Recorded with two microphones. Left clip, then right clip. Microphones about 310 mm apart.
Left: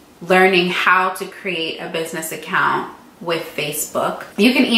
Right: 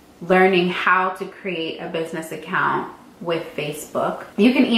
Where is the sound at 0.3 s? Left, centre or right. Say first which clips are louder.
Left 3 dB; centre.